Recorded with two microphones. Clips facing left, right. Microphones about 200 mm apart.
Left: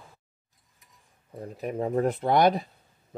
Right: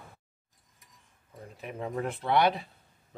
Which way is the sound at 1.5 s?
40° left (ahead or behind).